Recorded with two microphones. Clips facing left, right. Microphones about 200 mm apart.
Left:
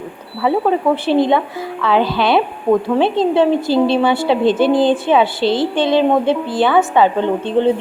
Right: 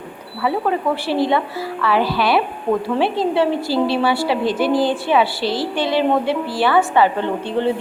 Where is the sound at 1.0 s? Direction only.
20° left (ahead or behind).